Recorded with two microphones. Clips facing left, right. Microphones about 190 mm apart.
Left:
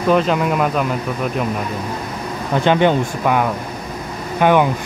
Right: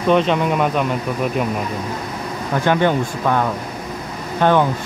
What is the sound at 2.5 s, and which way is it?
Speech, 20° left (ahead or behind).